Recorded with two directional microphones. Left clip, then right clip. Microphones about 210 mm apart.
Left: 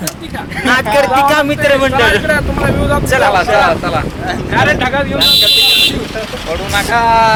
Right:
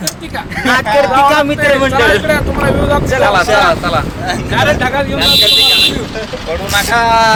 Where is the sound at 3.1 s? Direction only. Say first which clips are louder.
Left 2 dB; 35° left (ahead or behind).